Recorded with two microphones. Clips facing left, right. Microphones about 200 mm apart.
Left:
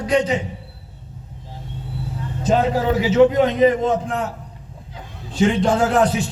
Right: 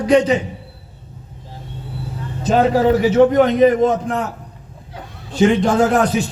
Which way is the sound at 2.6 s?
65° right (ahead or behind).